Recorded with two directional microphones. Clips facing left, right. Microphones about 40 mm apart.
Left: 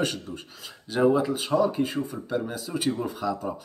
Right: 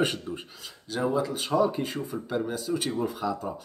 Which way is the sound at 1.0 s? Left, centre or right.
Left.